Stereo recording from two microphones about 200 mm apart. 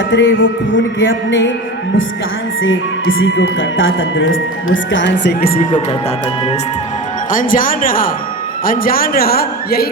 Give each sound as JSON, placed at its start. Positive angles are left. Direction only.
{"t": 0.1, "sound": "a man's voice", "side_deg": 65}
{"t": 2.6, "sound": "speech", "side_deg": 70}
{"t": 7.3, "sound": "a man's voice", "side_deg": 40}